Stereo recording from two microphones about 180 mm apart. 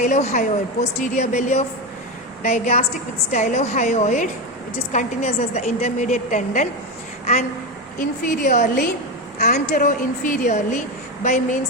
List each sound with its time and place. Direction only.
0.0 s a woman's voice: 40° left (ahead or behind)
7.9 s speech: 50° left (ahead or behind)